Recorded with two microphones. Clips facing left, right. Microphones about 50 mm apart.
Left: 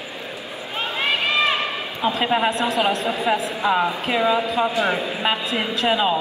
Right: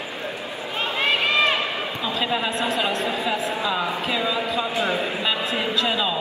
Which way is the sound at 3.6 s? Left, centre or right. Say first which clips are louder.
Left 5 dB; left.